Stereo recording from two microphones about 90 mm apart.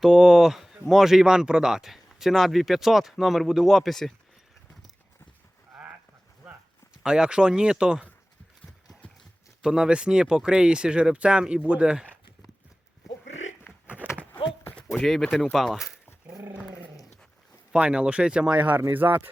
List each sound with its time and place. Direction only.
0.0 s speech: 5° right (ahead or behind)
7.0 s speech: 10° right (ahead or behind)
9.6 s speech: 5° right (ahead or behind)
13.8 s a sound: 15° right (ahead or behind)
14.9 s speech: 5° left (ahead or behind)
17.7 s speech: 10° right (ahead or behind)